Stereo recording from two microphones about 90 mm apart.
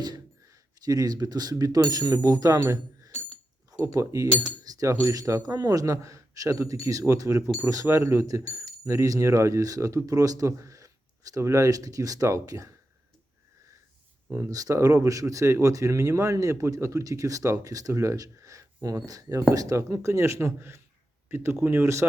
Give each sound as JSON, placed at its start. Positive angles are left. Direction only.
{"t": 0.0, "sound": "speech", "side_deg": -45}
{"t": 2.6, "sound": "a sound", "side_deg": -30}
{"t": 4.1, "sound": "speech", "side_deg": -40}
{"t": 14.3, "sound": "speech", "side_deg": -35}